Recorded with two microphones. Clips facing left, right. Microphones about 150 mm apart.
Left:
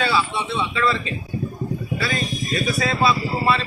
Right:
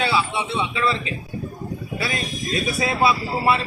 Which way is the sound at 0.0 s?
15° right (ahead or behind).